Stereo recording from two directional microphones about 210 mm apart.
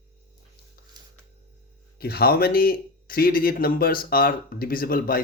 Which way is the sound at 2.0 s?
50° left (ahead or behind).